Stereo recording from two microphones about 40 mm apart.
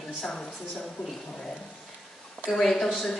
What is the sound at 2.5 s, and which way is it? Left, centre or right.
Speech, centre.